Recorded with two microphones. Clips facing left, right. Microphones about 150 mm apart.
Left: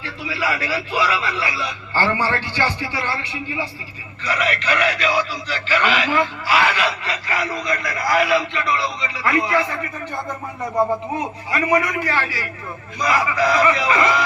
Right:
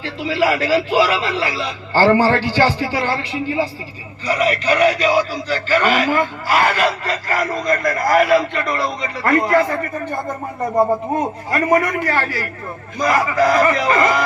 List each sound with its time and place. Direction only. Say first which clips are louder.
0.9 s a man's voice: right 5 dB; 35° right (ahead or behind)